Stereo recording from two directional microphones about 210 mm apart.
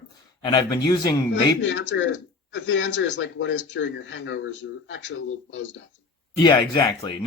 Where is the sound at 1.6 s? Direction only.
60° left (ahead or behind).